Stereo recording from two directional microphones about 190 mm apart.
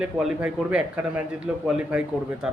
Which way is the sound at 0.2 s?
5° right (ahead or behind).